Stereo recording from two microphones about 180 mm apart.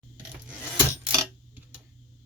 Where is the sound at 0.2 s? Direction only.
5° right (ahead or behind).